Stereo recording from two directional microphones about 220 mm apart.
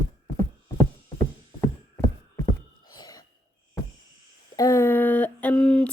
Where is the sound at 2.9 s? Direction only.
20° left (ahead or behind).